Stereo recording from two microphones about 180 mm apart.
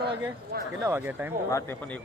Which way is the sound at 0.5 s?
60° right (ahead or behind).